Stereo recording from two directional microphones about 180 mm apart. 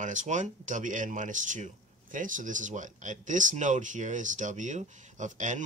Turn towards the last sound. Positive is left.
turn(degrees=-45)  # may be behind; listen again after turning